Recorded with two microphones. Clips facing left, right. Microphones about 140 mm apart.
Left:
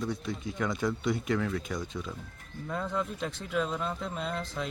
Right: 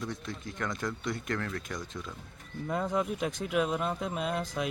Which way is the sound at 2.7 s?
15° right (ahead or behind).